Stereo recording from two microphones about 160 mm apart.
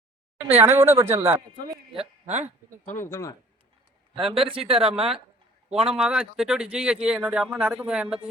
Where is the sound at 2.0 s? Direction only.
45° right (ahead or behind).